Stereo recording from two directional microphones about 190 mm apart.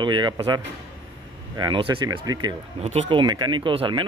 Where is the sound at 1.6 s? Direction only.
25° right (ahead or behind).